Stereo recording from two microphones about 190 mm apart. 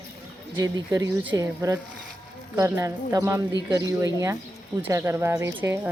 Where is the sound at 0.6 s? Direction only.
20° right (ahead or behind).